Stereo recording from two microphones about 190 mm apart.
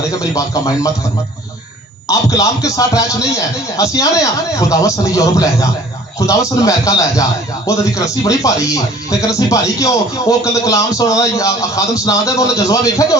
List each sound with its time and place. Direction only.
0.2 s speech: 20° left (ahead or behind)
2.0 s speech: 15° left (ahead or behind)